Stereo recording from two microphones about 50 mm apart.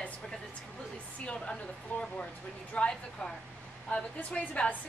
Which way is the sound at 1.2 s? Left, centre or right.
Centre.